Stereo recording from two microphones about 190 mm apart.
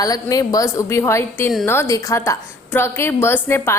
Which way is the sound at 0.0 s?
20° left (ahead or behind).